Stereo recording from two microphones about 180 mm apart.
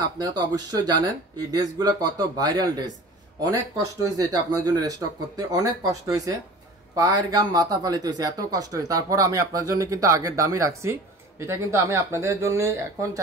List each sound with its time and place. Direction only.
0.0 s speech: 20° right (ahead or behind)